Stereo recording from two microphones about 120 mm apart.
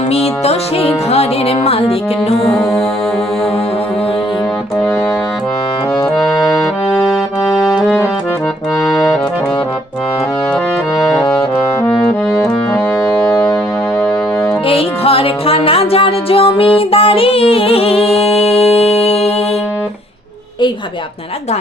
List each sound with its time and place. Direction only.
0.1 s music: 60° left (ahead or behind)
14.7 s music: 50° left (ahead or behind)